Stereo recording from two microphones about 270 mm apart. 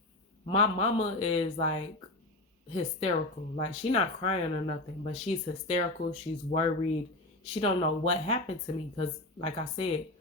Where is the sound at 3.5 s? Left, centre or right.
Left.